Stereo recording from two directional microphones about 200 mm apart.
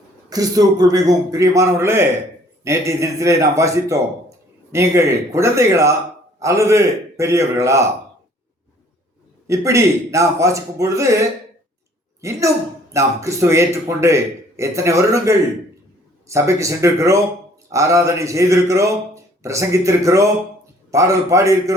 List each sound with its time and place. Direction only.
0.3 s speech: 20° right (ahead or behind)
9.5 s speech: 15° right (ahead or behind)
12.2 s speech: 15° right (ahead or behind)